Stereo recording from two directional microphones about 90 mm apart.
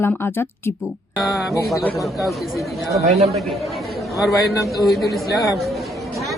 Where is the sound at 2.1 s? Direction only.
Centre (ahead or behind).